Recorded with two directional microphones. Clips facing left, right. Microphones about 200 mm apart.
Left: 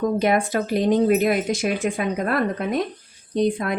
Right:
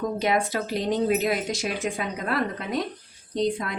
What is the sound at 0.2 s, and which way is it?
Speech, 55° left (ahead or behind).